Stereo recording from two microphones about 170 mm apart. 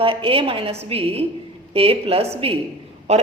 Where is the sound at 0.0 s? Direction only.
30° right (ahead or behind).